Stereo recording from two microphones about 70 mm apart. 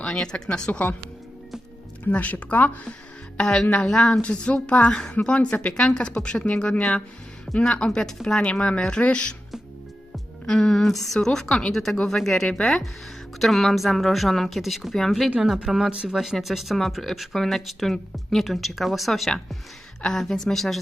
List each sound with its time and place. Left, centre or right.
0.0 s a woman's voice: centre
2.0 s speech: left
3.3 s a woman's voice: centre
10.4 s a woman's voice: centre
15.5 s speech: centre